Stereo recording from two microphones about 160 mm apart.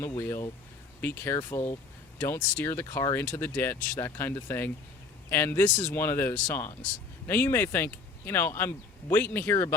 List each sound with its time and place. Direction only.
0.2 s speech: 20° left (ahead or behind)